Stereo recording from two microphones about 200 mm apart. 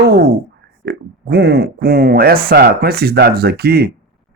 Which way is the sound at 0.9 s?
55° right (ahead or behind).